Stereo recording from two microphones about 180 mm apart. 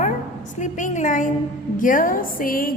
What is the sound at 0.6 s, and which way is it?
A woman's voice, 45° left (ahead or behind).